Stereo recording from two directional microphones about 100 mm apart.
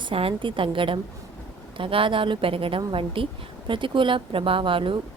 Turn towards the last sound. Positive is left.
turn(degrees=-60)  # may be behind; listen again after turning